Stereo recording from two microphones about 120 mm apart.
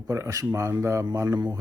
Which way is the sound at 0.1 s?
25° right (ahead or behind).